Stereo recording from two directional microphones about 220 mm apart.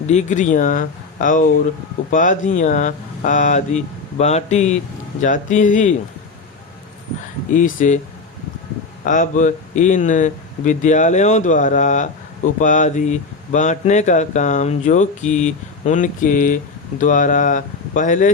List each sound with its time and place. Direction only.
0.1 s speech: 30° left (ahead or behind)
7.5 s speech: 35° left (ahead or behind)
9.0 s speech: 35° left (ahead or behind)